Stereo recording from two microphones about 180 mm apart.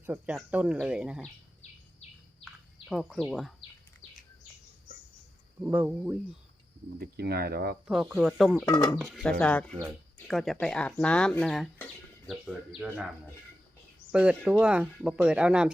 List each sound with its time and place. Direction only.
0.0 s speech: 10° right (ahead or behind)
2.9 s speech: centre (ahead or behind)
5.6 s speech: 10° right (ahead or behind)
7.0 s speech: 60° right (ahead or behind)
7.9 s speech: centre (ahead or behind)
8.6 s speech: 20° left (ahead or behind)
9.0 s speech: centre (ahead or behind)
14.1 s speech: 5° right (ahead or behind)